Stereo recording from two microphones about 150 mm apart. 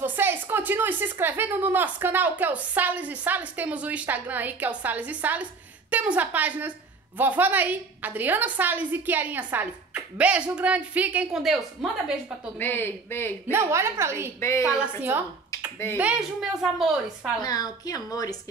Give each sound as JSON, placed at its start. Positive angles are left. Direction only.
{"t": 0.0, "sound": "a woman's voice", "side_deg": -15}
{"t": 12.5, "sound": "speech", "side_deg": 15}
{"t": 13.5, "sound": "a woman's voice", "side_deg": -20}
{"t": 14.4, "sound": "a woman's voice", "side_deg": 20}
{"t": 16.0, "sound": "a woman's voice", "side_deg": -5}
{"t": 17.4, "sound": "a woman's voice", "side_deg": 25}